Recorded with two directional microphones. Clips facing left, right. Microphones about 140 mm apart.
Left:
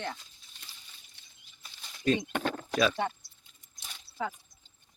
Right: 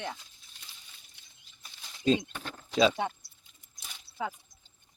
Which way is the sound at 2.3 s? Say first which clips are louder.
Left 11 dB; 85° left.